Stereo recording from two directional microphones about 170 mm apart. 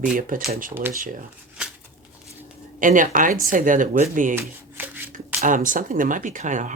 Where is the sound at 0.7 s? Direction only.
15° right (ahead or behind).